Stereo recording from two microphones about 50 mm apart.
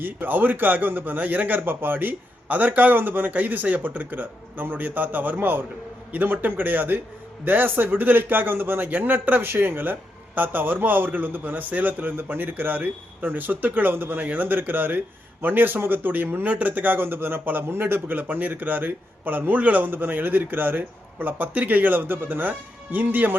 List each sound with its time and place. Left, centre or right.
0.0 s speech: right